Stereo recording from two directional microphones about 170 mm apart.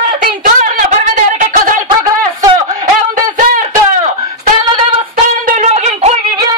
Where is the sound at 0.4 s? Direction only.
50° right (ahead or behind).